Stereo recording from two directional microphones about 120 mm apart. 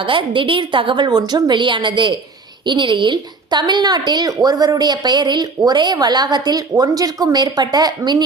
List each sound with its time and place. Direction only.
0.0 s a woman's voice: 45° right (ahead or behind)